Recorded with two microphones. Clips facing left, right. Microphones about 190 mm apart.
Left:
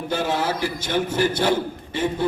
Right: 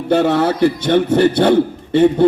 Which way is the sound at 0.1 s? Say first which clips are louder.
Right 10 dB; 65° right (ahead or behind).